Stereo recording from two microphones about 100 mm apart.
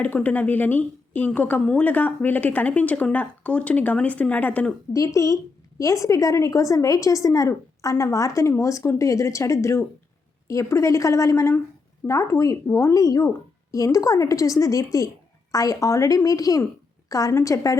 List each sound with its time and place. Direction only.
0.0 s a woman's voice: 15° left (ahead or behind)
4.9 s a woman's voice: 30° left (ahead or behind)